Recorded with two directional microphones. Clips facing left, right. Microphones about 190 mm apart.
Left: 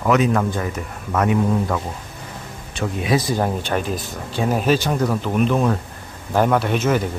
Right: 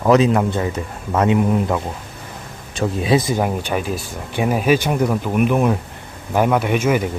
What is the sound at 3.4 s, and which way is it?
Speech, 10° right (ahead or behind).